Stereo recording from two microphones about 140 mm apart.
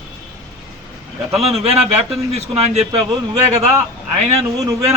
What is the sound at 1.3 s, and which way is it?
A man's voice, 45° right (ahead or behind).